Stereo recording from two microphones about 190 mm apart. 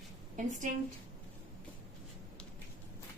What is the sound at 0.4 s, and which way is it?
Speech, 40° right (ahead or behind).